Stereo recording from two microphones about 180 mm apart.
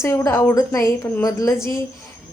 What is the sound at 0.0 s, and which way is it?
A woman's voice, 15° left (ahead or behind).